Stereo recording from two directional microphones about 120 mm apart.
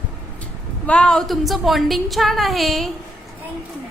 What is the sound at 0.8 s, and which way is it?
A woman's voice, 10° left (ahead or behind).